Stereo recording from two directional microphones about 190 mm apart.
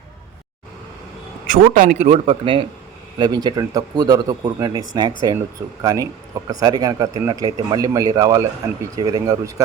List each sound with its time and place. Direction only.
1.5 s speech: 45° right (ahead or behind); by 9.6 s 20° right (ahead or behind)